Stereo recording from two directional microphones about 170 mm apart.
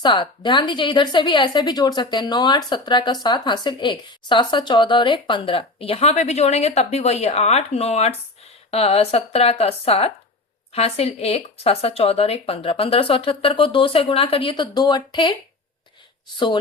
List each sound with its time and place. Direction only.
0.0 s a woman's voice: 30° left (ahead or behind)